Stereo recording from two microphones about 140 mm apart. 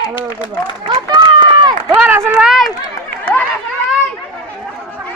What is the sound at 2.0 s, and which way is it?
Speech, 15° right (ahead or behind).